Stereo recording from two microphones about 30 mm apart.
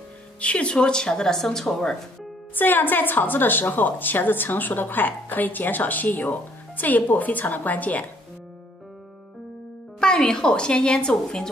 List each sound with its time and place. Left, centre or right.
0.4 s a woman's voice: left; by 1.8 s centre
2.5 s a woman's voice: left
9.9 s a woman's voice: left